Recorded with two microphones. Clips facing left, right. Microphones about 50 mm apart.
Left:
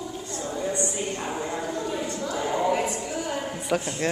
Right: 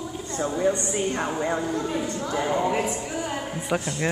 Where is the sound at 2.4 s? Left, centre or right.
Centre.